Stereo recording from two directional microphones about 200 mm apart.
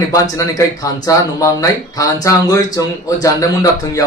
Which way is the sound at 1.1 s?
15° left (ahead or behind).